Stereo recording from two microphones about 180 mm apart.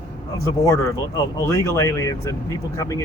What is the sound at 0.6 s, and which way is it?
Speech, 15° left (ahead or behind).